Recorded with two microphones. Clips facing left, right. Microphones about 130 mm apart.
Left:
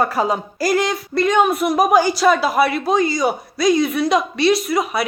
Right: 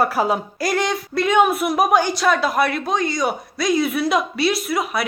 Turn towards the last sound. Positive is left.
turn(degrees=0)  # may be behind; listen again after turning